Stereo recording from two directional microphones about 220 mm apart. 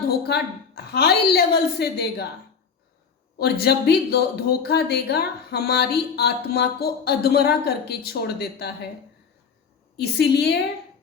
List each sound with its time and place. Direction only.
0.3 s speech: 45° left (ahead or behind)
3.3 s speech: 45° left (ahead or behind)
10.0 s speech: 50° left (ahead or behind)